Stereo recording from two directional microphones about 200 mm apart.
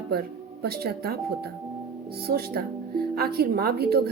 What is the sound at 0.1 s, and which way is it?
Speech, 50° right (ahead or behind).